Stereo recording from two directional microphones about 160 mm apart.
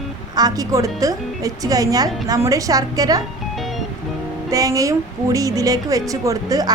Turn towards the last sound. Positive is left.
turn(degrees=-20)  # may be behind; listen again after turning